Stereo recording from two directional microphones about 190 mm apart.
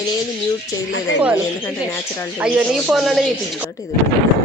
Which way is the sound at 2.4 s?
5° right (ahead or behind).